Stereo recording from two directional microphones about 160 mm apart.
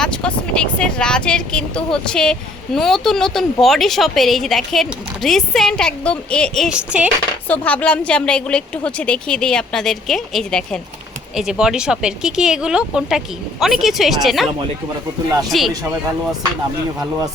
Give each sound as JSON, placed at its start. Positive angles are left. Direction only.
{"t": 0.0, "sound": "speech", "side_deg": 5}
{"t": 7.4, "sound": "speech", "side_deg": 10}
{"t": 15.5, "sound": "speech", "side_deg": 0}